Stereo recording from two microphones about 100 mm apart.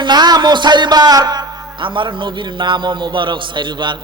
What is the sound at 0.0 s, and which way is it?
A man's voice, 45° right (ahead or behind).